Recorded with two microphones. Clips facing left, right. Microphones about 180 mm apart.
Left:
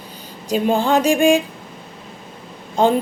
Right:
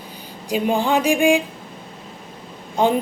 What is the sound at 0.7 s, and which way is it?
Speech, 15° right (ahead or behind).